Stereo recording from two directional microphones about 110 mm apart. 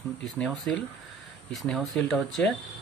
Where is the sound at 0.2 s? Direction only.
5° left (ahead or behind).